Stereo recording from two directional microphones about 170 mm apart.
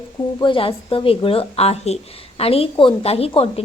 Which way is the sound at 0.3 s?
30° left (ahead or behind).